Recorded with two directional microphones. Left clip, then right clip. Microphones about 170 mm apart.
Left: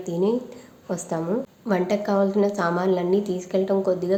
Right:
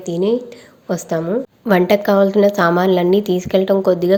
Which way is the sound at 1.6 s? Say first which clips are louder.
Right 10 dB; 40° right (ahead or behind).